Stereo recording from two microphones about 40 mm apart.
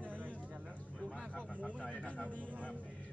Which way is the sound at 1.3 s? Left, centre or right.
Left.